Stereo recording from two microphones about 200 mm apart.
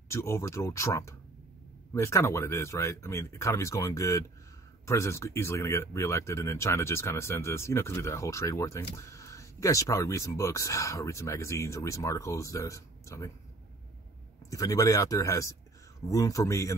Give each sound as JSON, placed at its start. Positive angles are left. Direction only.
{"t": 0.1, "sound": "speech", "side_deg": 15}
{"t": 14.5, "sound": "speech", "side_deg": 15}